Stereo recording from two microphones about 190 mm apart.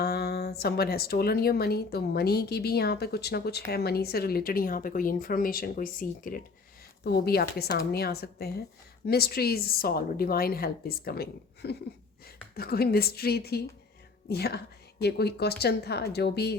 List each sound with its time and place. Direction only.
0.0 s a woman's voice: 55° left (ahead or behind)